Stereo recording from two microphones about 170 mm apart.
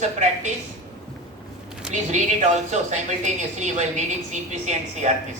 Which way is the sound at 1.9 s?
45° right (ahead or behind).